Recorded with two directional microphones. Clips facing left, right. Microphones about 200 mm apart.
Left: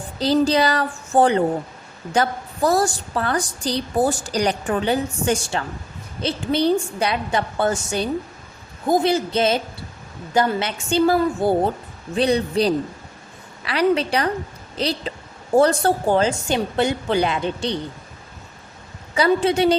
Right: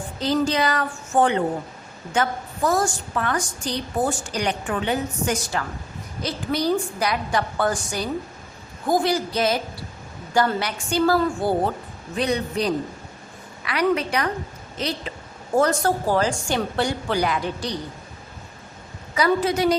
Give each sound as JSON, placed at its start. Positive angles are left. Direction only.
{"t": 0.2, "sound": "a woman's voice", "side_deg": 35}
{"t": 12.1, "sound": "a woman's voice", "side_deg": 30}
{"t": 19.1, "sound": "a woman's voice", "side_deg": 30}